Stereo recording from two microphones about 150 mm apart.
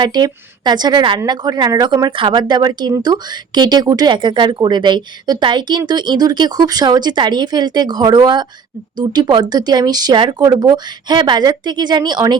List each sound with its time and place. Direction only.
0.0 s a woman's voice: 30° right (ahead or behind)